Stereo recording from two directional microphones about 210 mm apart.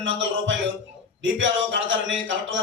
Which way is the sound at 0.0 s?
60° right (ahead or behind).